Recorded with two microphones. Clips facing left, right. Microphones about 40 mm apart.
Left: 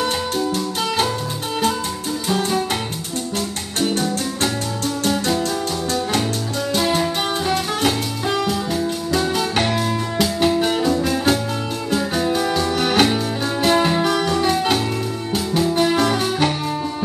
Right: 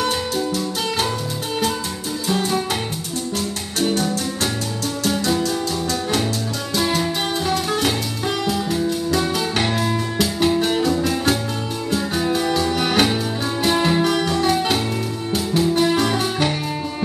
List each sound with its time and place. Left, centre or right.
2.2 s music: centre
7.7 s music: centre